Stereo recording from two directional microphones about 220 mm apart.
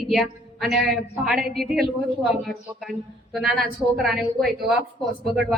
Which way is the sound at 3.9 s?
Centre (ahead or behind).